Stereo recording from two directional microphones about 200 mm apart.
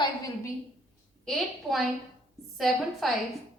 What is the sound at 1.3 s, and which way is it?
A woman's voice, centre (ahead or behind).